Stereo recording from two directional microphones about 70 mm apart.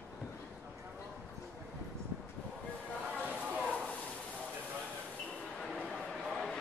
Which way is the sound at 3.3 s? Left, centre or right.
Right.